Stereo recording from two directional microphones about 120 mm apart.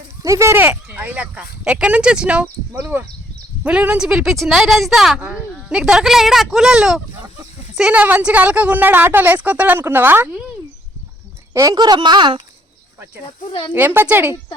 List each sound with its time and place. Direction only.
0.2 s speech: 25° right (ahead or behind)
11.5 s speech: 30° right (ahead or behind)
13.5 s speech: 45° left (ahead or behind)
13.7 s speech: 20° right (ahead or behind)